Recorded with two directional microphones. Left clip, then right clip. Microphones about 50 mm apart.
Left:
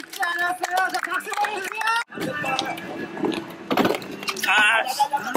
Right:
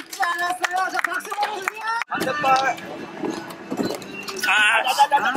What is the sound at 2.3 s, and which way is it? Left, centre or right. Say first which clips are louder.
Speech: right 9 dB; right.